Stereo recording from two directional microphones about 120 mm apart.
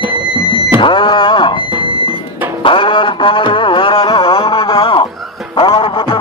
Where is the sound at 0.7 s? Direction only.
45° left (ahead or behind).